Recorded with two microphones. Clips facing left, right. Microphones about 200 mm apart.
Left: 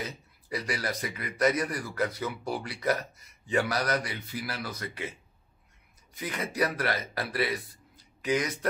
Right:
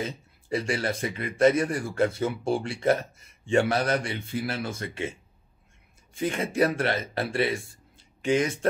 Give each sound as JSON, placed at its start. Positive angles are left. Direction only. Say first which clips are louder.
{"t": 0.0, "sound": "speech", "louder": "right 5 dB", "side_deg": -25}
{"t": 6.1, "sound": "a man's voice", "louder": "right 6 dB", "side_deg": -25}